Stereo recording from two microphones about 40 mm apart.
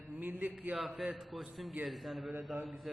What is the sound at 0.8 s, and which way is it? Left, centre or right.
A man's voice, centre.